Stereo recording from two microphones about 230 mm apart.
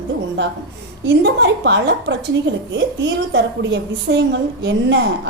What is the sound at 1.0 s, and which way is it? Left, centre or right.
A woman's voice, right.